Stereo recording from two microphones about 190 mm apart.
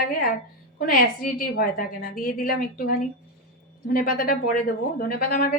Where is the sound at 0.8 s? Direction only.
50° left (ahead or behind).